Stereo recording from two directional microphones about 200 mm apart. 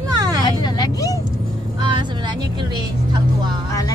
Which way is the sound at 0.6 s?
20° left (ahead or behind).